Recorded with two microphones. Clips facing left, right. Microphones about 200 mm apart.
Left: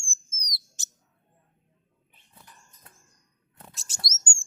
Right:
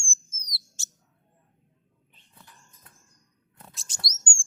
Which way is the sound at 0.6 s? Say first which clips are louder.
Right 2 dB; 20° left (ahead or behind).